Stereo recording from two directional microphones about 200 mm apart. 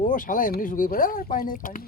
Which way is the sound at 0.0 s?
40° left (ahead or behind).